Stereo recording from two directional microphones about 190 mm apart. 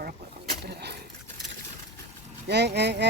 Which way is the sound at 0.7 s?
60° right (ahead or behind).